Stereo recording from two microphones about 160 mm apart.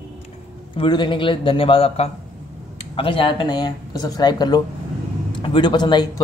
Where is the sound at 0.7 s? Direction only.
30° left (ahead or behind).